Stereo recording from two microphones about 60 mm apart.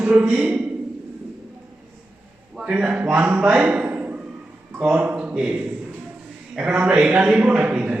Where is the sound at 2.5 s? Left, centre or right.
Centre.